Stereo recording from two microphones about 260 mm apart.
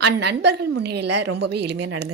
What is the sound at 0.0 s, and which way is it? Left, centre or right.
Speech, right.